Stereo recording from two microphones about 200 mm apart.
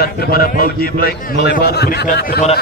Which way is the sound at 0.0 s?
50° left (ahead or behind).